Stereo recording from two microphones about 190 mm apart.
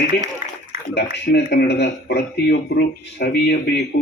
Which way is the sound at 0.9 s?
60° left (ahead or behind).